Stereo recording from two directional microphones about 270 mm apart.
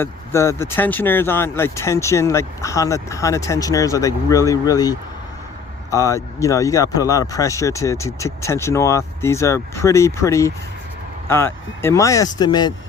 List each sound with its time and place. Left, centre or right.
0.0 s speech: centre